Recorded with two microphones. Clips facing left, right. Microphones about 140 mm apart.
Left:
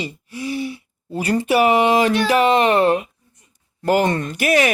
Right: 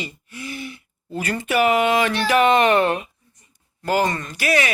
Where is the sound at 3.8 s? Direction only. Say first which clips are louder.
Left 4 dB; 50° left (ahead or behind).